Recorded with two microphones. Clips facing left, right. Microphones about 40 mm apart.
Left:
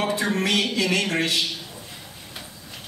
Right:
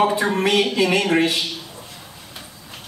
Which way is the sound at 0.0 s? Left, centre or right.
Centre.